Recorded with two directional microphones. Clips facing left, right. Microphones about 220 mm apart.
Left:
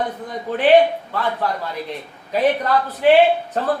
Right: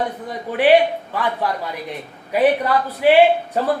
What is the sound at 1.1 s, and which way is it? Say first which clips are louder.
Speech: even; 15° right (ahead or behind).